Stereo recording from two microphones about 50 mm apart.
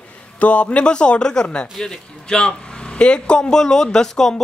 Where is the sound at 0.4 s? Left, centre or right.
Left.